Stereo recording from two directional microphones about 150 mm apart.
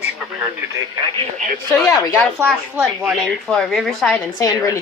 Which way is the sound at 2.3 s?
10° right (ahead or behind).